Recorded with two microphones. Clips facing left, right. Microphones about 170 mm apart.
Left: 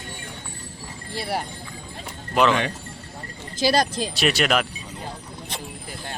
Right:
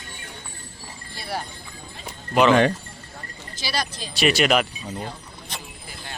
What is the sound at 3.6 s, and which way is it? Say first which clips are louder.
Speech: left 9 dB; 45° left (ahead or behind).